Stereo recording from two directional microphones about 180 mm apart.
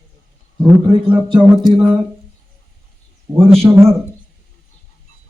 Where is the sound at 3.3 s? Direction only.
30° right (ahead or behind).